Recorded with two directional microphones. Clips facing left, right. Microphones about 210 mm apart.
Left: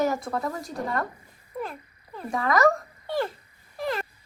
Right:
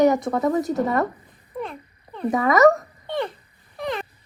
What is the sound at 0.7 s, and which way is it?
Speech, 20° right (ahead or behind).